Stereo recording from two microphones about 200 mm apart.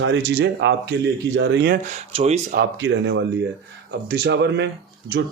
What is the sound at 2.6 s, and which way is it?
Speech, 60° right (ahead or behind).